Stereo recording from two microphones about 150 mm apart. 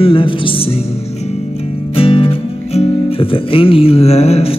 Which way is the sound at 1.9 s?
40° left (ahead or behind).